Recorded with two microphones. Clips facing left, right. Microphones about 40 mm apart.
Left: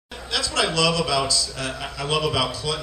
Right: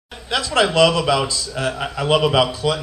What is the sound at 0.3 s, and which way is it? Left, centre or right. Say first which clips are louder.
A man's voice: right 6 dB; right.